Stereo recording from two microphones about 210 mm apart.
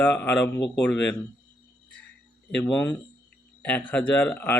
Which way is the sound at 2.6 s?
5° left (ahead or behind).